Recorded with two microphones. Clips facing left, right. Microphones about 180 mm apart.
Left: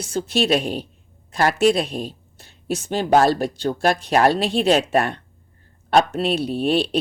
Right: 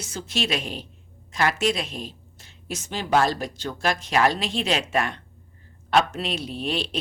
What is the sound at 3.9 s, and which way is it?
Speech, 35° left (ahead or behind).